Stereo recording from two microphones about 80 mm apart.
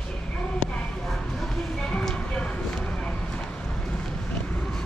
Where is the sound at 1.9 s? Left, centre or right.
Centre.